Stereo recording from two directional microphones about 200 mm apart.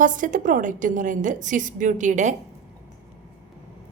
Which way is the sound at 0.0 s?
40° right (ahead or behind).